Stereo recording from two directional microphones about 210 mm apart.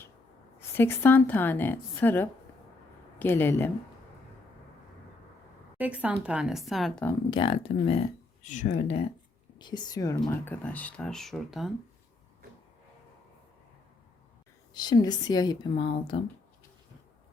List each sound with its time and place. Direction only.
0.8 s a woman's voice: 10° left (ahead or behind)
5.7 s speech: 5° right (ahead or behind)
7.3 s speech: 25° left (ahead or behind)
9.6 s speech: 20° left (ahead or behind); by 11.7 s centre (ahead or behind)
14.8 s speech: 20° left (ahead or behind)